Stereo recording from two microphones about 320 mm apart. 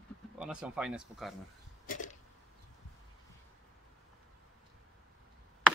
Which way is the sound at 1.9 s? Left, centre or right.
Left.